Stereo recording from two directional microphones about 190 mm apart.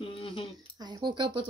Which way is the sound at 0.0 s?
30° left (ahead or behind).